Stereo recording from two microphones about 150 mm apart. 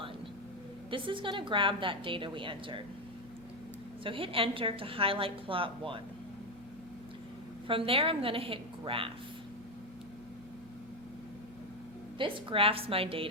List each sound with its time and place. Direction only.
0.9 s a woman's voice: 35° right (ahead or behind)
4.0 s a woman's voice: 35° right (ahead or behind)
7.7 s a woman's voice: 35° right (ahead or behind)
12.2 s a woman's voice: 35° right (ahead or behind)